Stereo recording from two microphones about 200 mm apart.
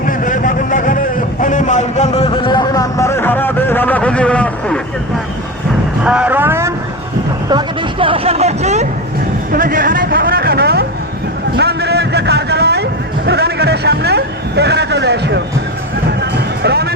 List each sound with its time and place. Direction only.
0.3 s a sound: 40° left (ahead or behind); by 4.8 s 5° left (ahead or behind)
6.1 s speech: 5° right (ahead or behind)
7.5 s speech: 25° right (ahead or behind)
9.5 s a sound: 45° right (ahead or behind)
11.5 s vehicle: 55° right (ahead or behind)
16.2 s music: 55° right (ahead or behind)